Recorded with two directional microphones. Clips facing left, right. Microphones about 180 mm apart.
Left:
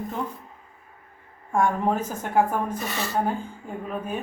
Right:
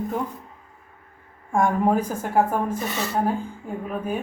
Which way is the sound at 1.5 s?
10° right (ahead or behind).